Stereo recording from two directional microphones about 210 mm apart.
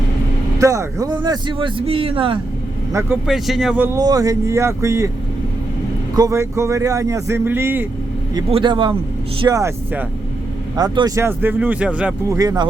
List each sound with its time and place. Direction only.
0.6 s a man's voice: 15° right (ahead or behind)
2.9 s speech: 10° right (ahead or behind)
6.1 s speech: 15° right (ahead or behind)
8.4 s a man's voice: 25° right (ahead or behind); by 12.4 s 5° right (ahead or behind)
12.4 s speech: 15° right (ahead or behind)